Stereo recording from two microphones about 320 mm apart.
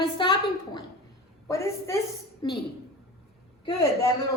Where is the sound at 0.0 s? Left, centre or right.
Centre.